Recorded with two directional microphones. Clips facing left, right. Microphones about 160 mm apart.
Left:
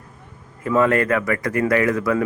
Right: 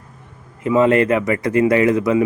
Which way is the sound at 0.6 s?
20° right (ahead or behind).